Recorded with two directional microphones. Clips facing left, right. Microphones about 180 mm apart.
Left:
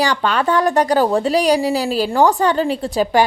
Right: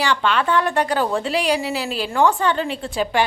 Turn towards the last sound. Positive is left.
turn(degrees=40)  # may be behind; listen again after turning